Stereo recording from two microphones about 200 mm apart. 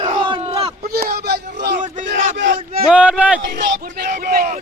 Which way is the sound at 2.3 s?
65° right (ahead or behind).